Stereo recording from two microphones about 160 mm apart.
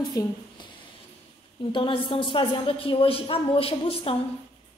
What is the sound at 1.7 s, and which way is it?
A woman's voice, 30° left (ahead or behind).